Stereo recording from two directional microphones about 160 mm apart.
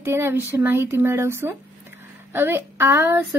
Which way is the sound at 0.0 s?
15° right (ahead or behind).